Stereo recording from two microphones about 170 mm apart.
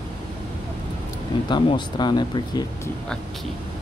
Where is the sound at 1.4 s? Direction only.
25° left (ahead or behind).